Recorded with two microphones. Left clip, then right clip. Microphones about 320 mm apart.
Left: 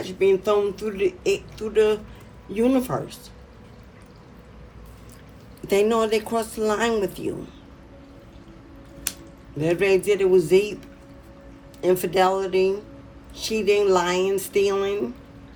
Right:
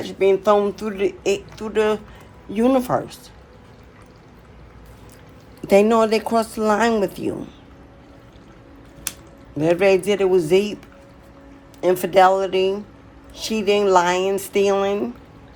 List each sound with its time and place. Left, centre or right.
0.0 s speech: centre
5.6 s speech: right
9.6 s speech: right
11.8 s speech: right